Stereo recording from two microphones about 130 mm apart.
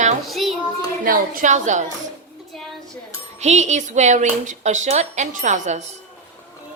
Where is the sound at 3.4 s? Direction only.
60° right (ahead or behind).